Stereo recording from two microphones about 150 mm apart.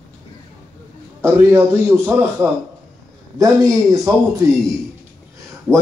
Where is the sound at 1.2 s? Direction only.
15° right (ahead or behind).